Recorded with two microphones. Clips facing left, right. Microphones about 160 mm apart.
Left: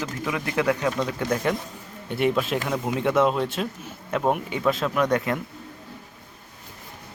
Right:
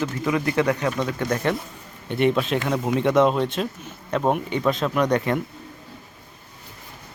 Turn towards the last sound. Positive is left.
turn(degrees=0)  # may be behind; listen again after turning